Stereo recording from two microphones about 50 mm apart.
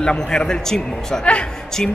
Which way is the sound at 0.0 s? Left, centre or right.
Centre.